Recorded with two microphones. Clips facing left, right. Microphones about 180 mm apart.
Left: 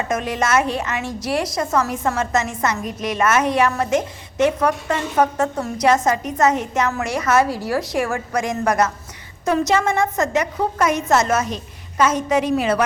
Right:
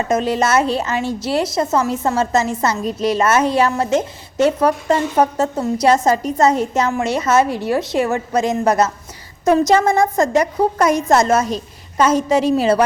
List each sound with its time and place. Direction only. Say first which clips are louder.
0.1 s a woman's voice: right 4 dB; 30° right (ahead or behind)
9.6 s a woman's voice: right 4 dB; 35° right (ahead or behind)